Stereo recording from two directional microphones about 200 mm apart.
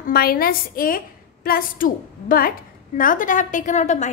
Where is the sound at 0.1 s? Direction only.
50° left (ahead or behind).